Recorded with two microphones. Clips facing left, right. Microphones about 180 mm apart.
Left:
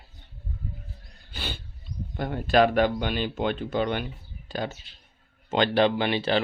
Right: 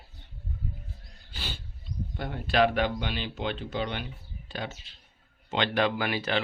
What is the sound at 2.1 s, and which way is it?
Speech, 45° left (ahead or behind).